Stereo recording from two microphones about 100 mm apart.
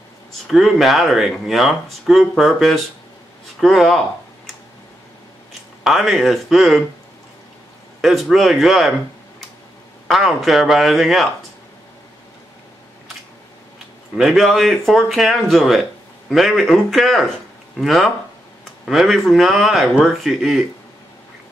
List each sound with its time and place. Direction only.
0.5 s speech: centre (ahead or behind)
5.9 s speech: 5° right (ahead or behind)
8.0 s speech: centre (ahead or behind)
10.0 s speech: centre (ahead or behind)
14.1 s speech: centre (ahead or behind)